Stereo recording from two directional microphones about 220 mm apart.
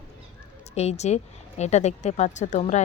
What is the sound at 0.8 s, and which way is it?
A woman's voice, 30° left (ahead or behind).